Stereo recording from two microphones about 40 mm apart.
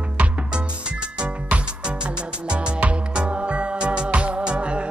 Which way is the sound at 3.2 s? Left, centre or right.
Right.